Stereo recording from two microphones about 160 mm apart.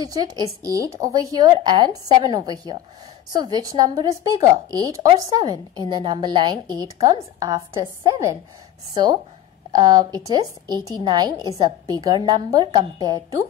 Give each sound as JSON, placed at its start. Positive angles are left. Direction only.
{"t": 0.0, "sound": "a woman's voice", "side_deg": -25}